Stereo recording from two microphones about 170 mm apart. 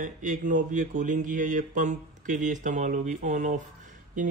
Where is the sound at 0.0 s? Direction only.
50° right (ahead or behind).